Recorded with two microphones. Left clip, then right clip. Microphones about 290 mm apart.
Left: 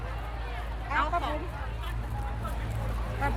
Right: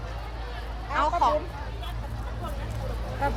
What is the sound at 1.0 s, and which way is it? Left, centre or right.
Speech, centre.